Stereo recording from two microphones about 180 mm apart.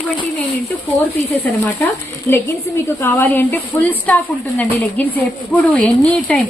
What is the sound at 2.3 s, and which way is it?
A woman's voice, 10° left (ahead or behind).